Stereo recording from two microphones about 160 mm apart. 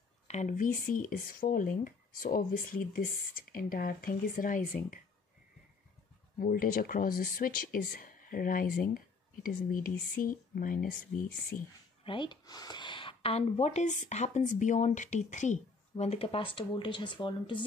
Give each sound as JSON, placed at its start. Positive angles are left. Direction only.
{"t": 0.3, "sound": "speech", "side_deg": 50}
{"t": 6.4, "sound": "speech", "side_deg": 60}
{"t": 12.0, "sound": "speech", "side_deg": 30}